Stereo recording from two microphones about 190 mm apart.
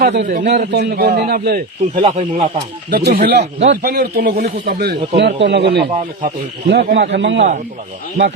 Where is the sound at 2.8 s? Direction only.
50° right (ahead or behind).